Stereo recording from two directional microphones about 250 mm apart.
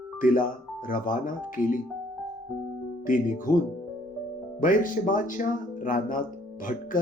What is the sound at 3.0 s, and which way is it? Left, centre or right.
Speech, left.